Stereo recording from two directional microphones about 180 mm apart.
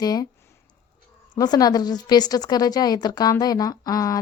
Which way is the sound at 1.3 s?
20° left (ahead or behind).